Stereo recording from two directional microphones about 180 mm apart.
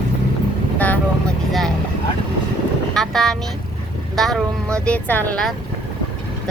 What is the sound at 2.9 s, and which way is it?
Speech, centre (ahead or behind).